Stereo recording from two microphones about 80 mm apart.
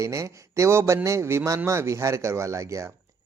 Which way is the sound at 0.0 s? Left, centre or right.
Right.